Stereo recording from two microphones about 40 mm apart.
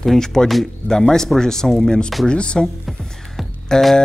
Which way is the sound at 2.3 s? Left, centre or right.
Left.